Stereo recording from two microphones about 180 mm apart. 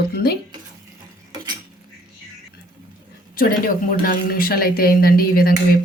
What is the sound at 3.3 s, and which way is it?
Speech, 50° left (ahead or behind).